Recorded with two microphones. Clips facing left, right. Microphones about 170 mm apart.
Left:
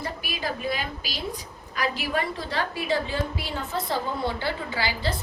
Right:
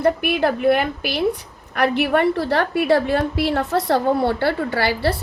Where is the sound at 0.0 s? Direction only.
60° right (ahead or behind).